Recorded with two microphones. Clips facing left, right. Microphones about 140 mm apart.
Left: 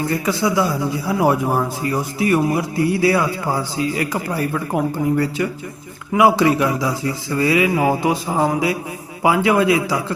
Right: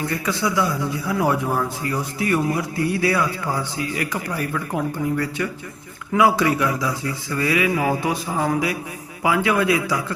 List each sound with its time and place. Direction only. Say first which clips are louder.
0.0 s a man's voice: left 4 dB; 20° left (ahead or behind)